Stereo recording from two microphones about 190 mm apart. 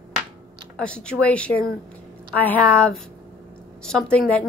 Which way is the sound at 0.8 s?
5° left (ahead or behind).